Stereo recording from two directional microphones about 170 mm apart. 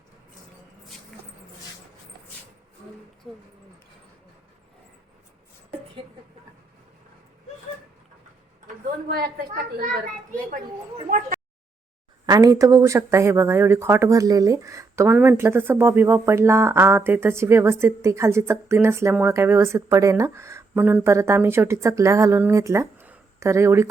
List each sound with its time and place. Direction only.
3.3 s a sound: centre (ahead or behind)
8.6 s speech: 55° right (ahead or behind)
12.2 s speech: 20° right (ahead or behind)